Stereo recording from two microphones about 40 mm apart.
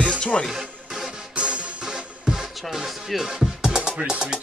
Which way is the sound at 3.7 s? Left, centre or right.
Right.